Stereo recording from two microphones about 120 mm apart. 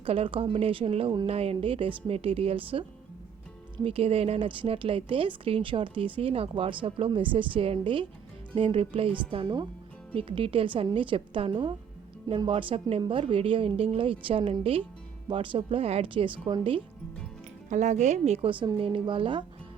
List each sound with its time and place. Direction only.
0.0 s a woman's voice: 50° right (ahead or behind)
3.8 s a woman's voice: 50° right (ahead or behind)
17.7 s speech: 80° right
18.4 s a woman's voice: 45° right (ahead or behind)